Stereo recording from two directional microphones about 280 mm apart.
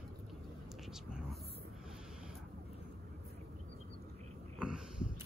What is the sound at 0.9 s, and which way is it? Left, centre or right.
Whispering, centre.